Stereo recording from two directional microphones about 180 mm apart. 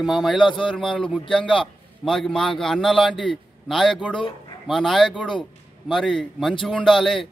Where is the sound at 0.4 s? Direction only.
25° left (ahead or behind).